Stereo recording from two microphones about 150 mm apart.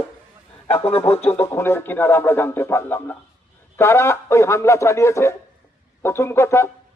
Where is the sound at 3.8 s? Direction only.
20° left (ahead or behind).